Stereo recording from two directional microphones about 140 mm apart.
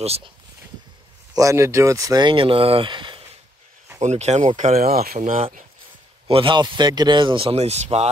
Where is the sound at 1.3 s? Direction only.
20° right (ahead or behind).